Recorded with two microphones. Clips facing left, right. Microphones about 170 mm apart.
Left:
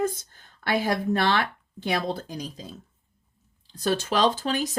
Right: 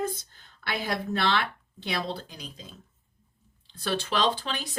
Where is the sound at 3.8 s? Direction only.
40° left (ahead or behind).